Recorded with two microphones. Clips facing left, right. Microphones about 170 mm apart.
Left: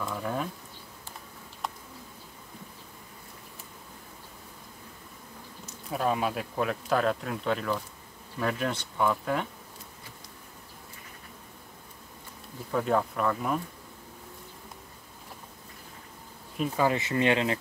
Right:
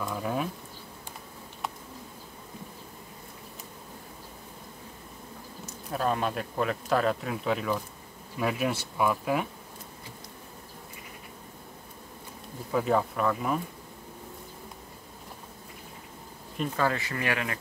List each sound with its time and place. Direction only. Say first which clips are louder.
0.0 s a sound: right 1 dB; 5° right (ahead or behind)
5.9 s speech: even; 5° left (ahead or behind)
12.7 s speech: right 1 dB; centre (ahead or behind)
16.5 s speech: left 2 dB; 5° left (ahead or behind)
16.8 s speech: left 4 dB; 20° left (ahead or behind)